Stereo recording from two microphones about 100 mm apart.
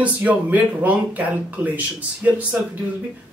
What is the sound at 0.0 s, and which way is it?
Speech, 15° right (ahead or behind).